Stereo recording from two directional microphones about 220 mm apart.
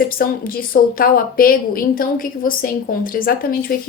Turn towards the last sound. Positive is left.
turn(degrees=40)  # may be behind; listen again after turning